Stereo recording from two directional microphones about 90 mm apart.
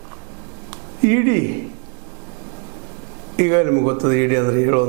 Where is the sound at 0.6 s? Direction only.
15° right (ahead or behind).